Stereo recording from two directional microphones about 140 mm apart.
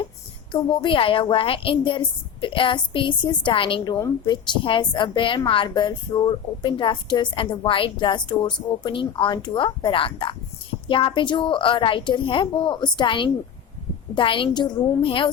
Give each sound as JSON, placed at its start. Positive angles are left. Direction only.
{"t": 0.5, "sound": "a woman's voice", "side_deg": 35}